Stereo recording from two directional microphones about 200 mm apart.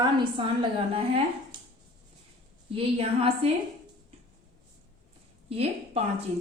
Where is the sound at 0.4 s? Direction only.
25° right (ahead or behind).